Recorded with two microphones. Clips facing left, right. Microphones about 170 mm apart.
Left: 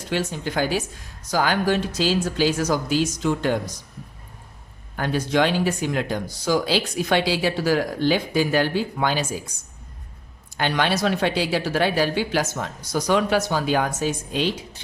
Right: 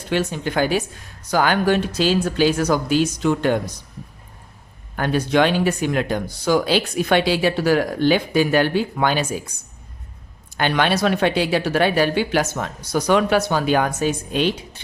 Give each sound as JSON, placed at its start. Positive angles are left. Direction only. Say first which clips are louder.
{"t": 0.1, "sound": "speech", "louder": "right 4 dB", "side_deg": -60}
{"t": 4.9, "sound": "speech", "louder": "right 3 dB", "side_deg": -60}
{"t": 10.6, "sound": "speech", "louder": "right 3 dB", "side_deg": -60}